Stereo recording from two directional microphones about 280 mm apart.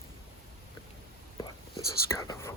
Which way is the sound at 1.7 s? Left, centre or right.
Centre.